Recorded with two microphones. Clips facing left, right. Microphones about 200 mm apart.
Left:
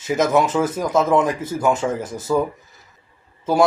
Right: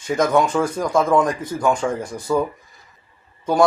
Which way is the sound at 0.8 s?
10° left (ahead or behind).